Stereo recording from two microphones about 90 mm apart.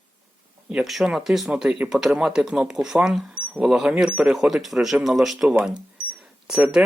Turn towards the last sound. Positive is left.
turn(degrees=-10)  # may be behind; listen again after turning